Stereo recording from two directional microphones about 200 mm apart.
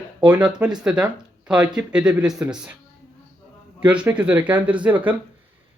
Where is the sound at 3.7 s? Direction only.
5° right (ahead or behind).